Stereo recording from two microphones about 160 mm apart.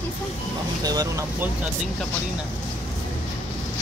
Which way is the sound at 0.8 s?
25° right (ahead or behind).